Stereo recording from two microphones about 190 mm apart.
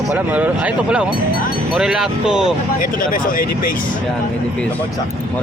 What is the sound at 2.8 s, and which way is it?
Speech, 45° left (ahead or behind).